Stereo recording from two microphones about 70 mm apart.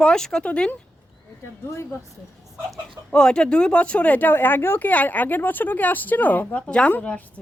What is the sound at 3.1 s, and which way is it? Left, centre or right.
A woman's voice, centre.